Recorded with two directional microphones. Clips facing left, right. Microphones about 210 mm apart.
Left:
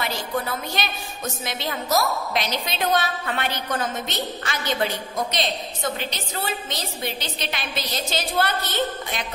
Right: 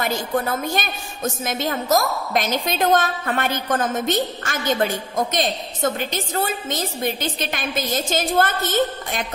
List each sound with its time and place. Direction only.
0.0 s a woman's voice: 50° right (ahead or behind)